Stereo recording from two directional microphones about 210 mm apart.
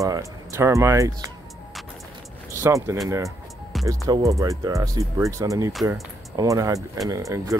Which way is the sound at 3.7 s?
Centre (ahead or behind).